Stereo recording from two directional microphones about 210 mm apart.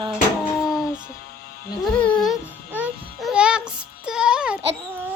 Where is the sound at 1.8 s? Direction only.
5° left (ahead or behind).